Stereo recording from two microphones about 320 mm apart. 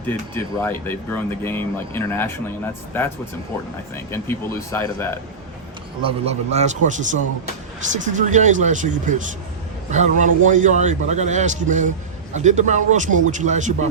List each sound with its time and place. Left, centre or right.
0.1 s speech: centre
4.7 s speech: centre
6.0 s a man's voice: centre